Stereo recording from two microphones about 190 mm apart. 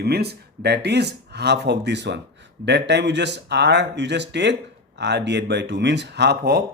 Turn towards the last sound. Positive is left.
turn(degrees=-60)  # may be behind; listen again after turning